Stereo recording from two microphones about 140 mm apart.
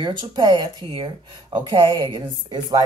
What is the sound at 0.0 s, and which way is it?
Speech, 30° right (ahead or behind).